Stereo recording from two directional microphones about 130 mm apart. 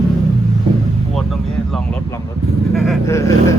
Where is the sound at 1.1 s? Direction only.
5° left (ahead or behind).